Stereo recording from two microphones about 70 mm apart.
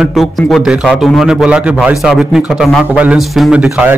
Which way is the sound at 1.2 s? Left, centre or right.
Centre.